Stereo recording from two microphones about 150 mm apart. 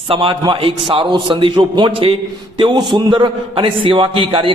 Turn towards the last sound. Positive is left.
turn(degrees=-35)  # may be behind; listen again after turning